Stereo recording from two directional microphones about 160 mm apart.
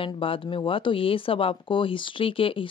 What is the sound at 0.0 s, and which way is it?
Speech, 35° left (ahead or behind).